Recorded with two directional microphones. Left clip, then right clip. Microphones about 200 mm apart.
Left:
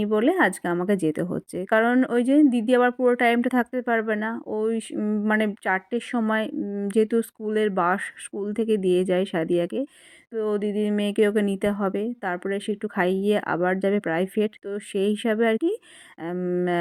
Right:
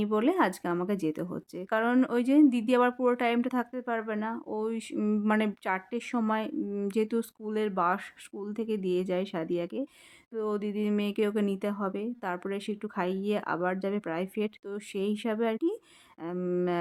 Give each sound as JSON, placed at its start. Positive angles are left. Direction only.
{"t": 0.0, "sound": "speech", "side_deg": 15}